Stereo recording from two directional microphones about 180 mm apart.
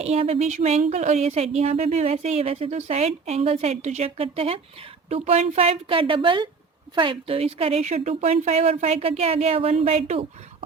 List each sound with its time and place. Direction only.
0.0 s a woman's voice: 35° right (ahead or behind)